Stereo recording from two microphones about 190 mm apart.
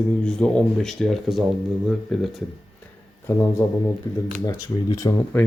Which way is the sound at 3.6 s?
20° left (ahead or behind).